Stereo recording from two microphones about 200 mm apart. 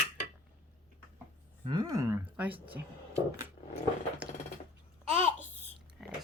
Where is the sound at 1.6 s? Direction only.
20° right (ahead or behind).